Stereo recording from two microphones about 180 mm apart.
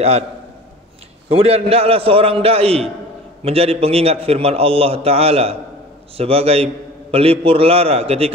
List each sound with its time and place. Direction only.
1.3 s a man's voice: 30° right (ahead or behind)